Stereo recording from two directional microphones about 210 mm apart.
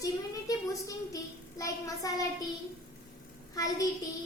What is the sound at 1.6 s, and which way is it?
Speech, 15° left (ahead or behind).